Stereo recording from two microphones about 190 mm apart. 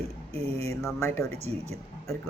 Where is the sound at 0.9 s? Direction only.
15° left (ahead or behind).